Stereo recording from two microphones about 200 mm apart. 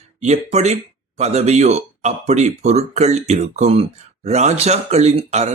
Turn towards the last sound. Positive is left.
turn(degrees=-35)  # may be behind; listen again after turning